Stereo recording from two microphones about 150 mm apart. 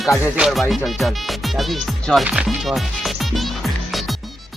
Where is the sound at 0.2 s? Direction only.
5° right (ahead or behind).